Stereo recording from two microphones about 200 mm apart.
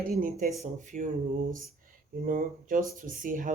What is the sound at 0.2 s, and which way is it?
Speech, 45° right (ahead or behind).